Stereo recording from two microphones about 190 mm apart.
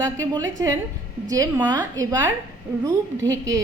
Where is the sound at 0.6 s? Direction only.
20° right (ahead or behind).